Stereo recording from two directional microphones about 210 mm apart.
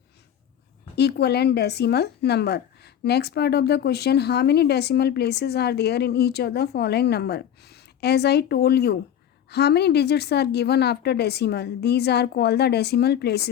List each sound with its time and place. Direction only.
0.9 s speech: 50° left (ahead or behind)